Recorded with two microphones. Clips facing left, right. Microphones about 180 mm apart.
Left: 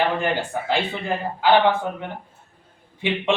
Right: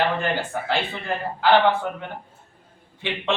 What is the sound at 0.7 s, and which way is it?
A man's voice, 15° left (ahead or behind).